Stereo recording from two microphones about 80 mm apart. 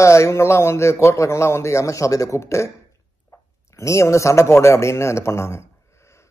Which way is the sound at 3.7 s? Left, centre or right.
Left.